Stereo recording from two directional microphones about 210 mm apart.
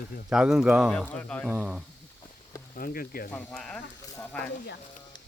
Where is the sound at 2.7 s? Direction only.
45° left (ahead or behind).